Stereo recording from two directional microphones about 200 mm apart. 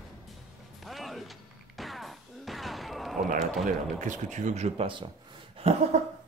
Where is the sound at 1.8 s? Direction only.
Centre (ahead or behind).